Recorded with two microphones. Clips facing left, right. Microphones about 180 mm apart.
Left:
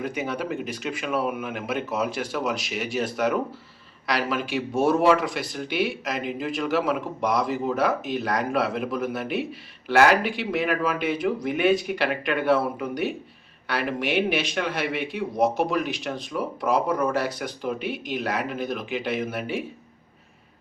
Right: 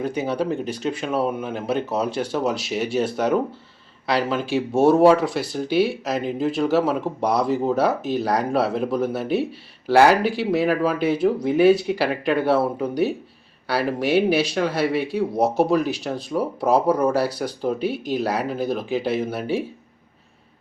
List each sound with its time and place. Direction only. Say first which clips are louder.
0.0 s speech: right 5 dB; 30° right (ahead or behind)